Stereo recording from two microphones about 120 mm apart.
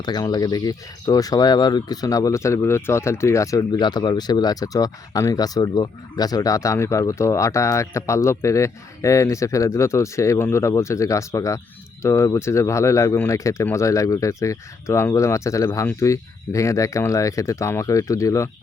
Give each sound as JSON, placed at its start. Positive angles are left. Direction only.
{"t": 0.0, "sound": "speech", "side_deg": 35}